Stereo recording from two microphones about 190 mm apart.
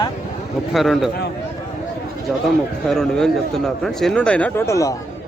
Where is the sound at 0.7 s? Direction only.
Centre (ahead or behind).